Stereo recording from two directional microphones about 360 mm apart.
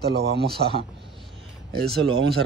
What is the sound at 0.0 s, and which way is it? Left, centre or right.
Speech, right.